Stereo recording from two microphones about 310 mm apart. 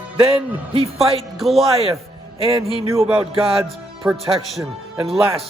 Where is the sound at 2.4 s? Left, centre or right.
Centre.